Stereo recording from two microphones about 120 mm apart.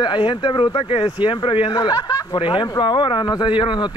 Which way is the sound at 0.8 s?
55° left (ahead or behind).